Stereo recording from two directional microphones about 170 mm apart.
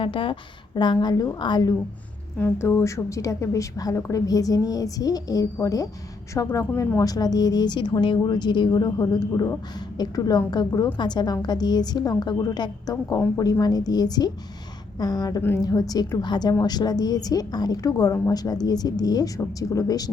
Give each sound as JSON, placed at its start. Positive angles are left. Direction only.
{"t": 0.0, "sound": "a woman's voice", "side_deg": 30}
{"t": 2.4, "sound": "a woman's voice", "side_deg": 15}